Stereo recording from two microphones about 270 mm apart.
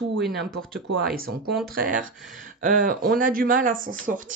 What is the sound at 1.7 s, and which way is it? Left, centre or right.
Speech, right.